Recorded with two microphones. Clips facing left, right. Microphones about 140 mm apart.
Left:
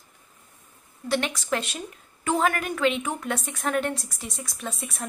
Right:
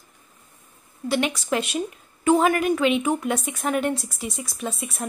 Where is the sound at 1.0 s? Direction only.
10° right (ahead or behind).